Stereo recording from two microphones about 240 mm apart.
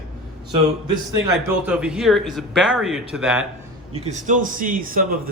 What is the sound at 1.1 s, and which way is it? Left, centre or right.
Speech, centre.